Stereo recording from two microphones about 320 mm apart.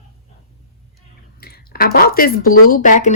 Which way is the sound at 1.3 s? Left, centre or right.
Left.